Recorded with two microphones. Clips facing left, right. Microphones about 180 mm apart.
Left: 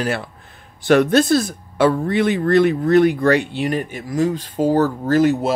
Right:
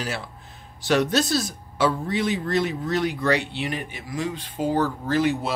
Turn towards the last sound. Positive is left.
turn(degrees=45)  # may be behind; listen again after turning